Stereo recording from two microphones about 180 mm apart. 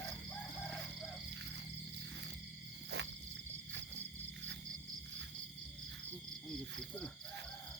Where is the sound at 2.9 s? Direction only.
70° right (ahead or behind).